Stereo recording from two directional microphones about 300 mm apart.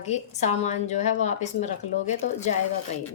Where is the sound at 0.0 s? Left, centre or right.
Left.